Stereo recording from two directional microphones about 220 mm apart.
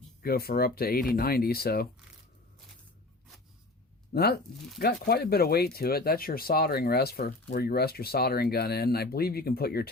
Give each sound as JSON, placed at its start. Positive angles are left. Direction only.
{"t": 0.2, "sound": "speech", "side_deg": 45}
{"t": 4.1, "sound": "speech", "side_deg": 45}